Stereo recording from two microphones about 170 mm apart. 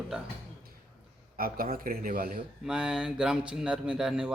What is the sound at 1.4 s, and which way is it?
Speech, 60° right (ahead or behind).